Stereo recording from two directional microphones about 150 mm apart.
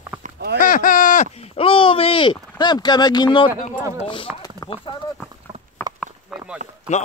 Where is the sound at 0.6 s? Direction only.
65° left (ahead or behind); by 2.3 s 35° left (ahead or behind).